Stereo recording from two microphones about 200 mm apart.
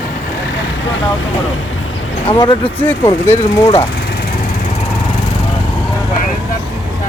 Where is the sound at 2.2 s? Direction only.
20° left (ahead or behind).